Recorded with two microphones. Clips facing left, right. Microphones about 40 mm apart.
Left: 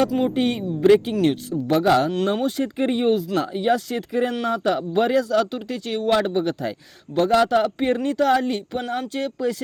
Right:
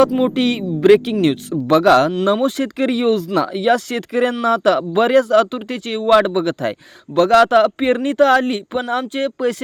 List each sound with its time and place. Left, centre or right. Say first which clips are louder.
0.3 s speech: right 4 dB; right
1.2 s speech: right 4 dB; right
2.2 s speech: right 5 dB; right